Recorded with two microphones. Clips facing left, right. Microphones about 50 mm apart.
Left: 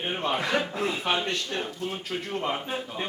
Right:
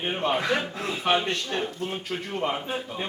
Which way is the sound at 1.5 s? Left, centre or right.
Right.